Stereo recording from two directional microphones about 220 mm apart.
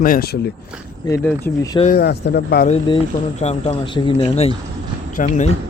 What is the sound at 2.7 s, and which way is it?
A man's voice, 20° left (ahead or behind).